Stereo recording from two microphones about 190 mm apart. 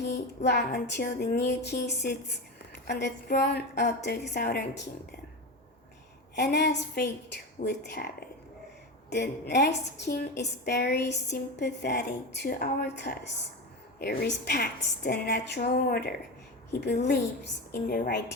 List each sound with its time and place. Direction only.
0.4 s a woman's voice: 60° left (ahead or behind)
6.3 s a woman's voice: 60° left (ahead or behind)
17.7 s a woman's voice: 50° left (ahead or behind)